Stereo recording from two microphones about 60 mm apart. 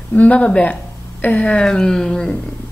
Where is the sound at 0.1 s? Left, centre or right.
Left.